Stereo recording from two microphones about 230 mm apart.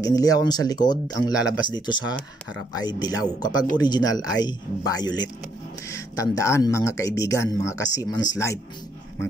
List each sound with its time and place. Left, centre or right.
0.0 s speech: centre
5.9 s a sound: centre
6.3 s speech: centre